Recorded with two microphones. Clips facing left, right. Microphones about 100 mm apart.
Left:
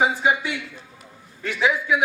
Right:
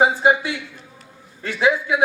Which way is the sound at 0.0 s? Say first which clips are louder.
Right 4 dB; 30° right (ahead or behind).